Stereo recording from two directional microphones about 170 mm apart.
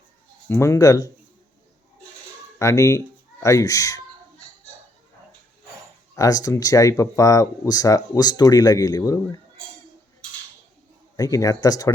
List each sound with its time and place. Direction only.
0.4 s speech: 15° left (ahead or behind)
2.6 s speech: 15° left (ahead or behind)
6.1 s speech: 20° left (ahead or behind)
11.2 s speech: 20° left (ahead or behind)